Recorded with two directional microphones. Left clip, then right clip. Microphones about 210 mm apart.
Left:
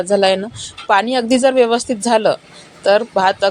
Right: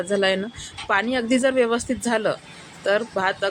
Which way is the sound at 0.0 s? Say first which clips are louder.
Left 7 dB; 5° left (ahead or behind).